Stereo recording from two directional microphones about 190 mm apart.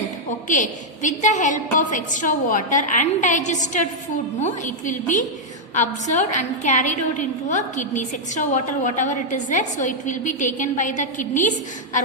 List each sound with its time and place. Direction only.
0.4 s a woman's voice: 40° left (ahead or behind)